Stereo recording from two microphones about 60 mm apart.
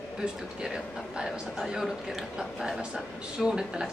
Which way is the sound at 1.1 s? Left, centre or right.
Centre.